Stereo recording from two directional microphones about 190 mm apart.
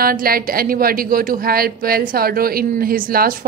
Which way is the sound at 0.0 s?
50° right (ahead or behind).